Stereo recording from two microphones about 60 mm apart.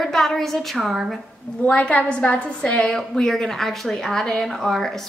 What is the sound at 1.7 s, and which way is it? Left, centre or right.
A woman's voice, left.